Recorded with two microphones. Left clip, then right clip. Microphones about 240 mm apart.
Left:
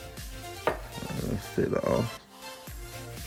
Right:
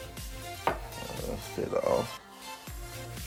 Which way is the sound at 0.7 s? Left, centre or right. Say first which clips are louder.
Left 1 dB; centre.